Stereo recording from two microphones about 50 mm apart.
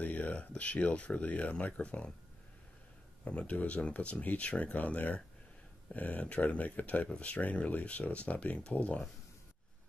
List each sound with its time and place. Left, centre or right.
0.0 s speech: left
3.3 s speech: left